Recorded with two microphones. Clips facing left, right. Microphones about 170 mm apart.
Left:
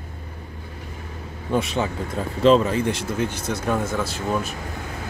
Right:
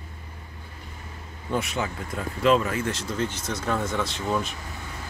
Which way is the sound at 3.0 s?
10° left (ahead or behind).